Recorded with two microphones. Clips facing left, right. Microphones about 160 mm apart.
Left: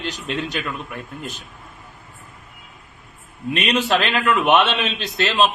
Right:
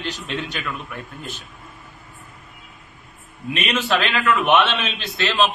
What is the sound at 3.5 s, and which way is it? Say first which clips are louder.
A man's voice: left 2 dB; 35° left (ahead or behind).